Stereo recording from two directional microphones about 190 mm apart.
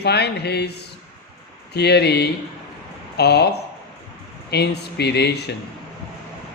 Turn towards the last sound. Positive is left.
turn(degrees=60)  # may be behind; listen again after turning